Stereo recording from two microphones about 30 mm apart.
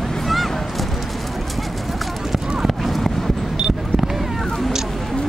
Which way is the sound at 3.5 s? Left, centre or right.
Right.